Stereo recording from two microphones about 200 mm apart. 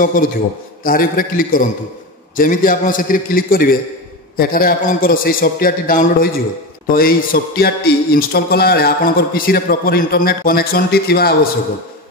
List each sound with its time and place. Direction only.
0.0 s speech: 40° left (ahead or behind)